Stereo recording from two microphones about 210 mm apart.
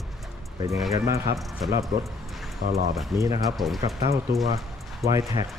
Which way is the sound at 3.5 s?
Centre (ahead or behind).